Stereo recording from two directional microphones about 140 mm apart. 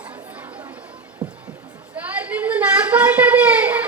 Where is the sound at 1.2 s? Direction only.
30° right (ahead or behind).